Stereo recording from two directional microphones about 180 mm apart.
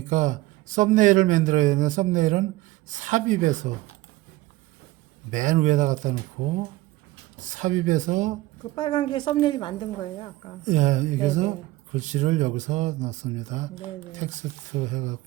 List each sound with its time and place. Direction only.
0.1 s a man's voice: 45° right (ahead or behind)
5.3 s a man's voice: 45° right (ahead or behind)
7.3 s a man's voice: 45° right (ahead or behind)
8.7 s a woman's voice: 25° left (ahead or behind)
10.7 s a man's voice: 40° right (ahead or behind)